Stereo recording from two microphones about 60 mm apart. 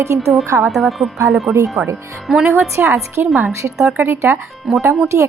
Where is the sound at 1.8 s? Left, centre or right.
Right.